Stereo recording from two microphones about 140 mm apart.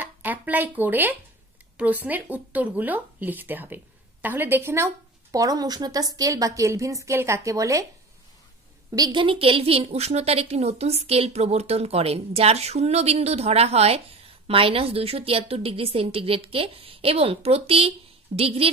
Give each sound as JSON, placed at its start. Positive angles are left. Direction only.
{"t": 0.0, "sound": "speech", "side_deg": -10}
{"t": 8.9, "sound": "a woman's voice", "side_deg": -30}